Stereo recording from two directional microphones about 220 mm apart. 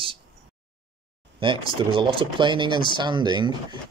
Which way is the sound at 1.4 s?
25° right (ahead or behind).